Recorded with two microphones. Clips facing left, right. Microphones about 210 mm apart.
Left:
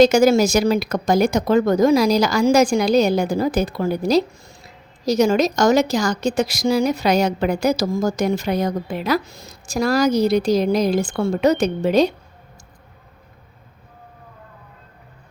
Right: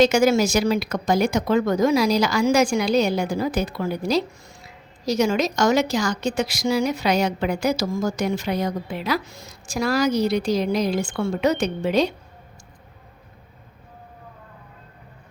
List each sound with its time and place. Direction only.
0.0 s a woman's voice: 40° left (ahead or behind)